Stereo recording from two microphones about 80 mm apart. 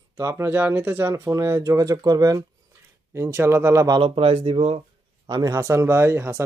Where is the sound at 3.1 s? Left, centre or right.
Right.